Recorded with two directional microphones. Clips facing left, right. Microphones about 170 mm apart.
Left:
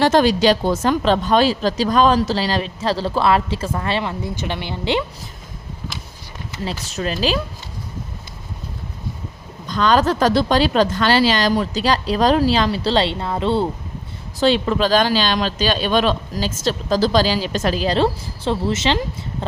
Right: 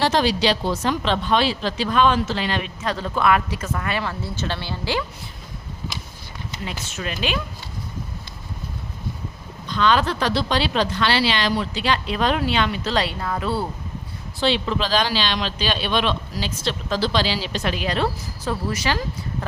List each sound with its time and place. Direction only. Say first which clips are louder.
0.0 s speech: left 5 dB; 50° left (ahead or behind); by 5.0 s 20° left (ahead or behind)
6.7 s speech: left 7 dB; 35° left (ahead or behind)
9.6 s speech: left 3 dB; 45° left (ahead or behind); by 13.7 s 25° left (ahead or behind)
14.3 s speech: left 5 dB; 45° left (ahead or behind); by 19.5 s 25° left (ahead or behind)